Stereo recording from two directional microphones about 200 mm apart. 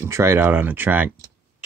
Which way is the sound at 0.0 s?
15° right (ahead or behind).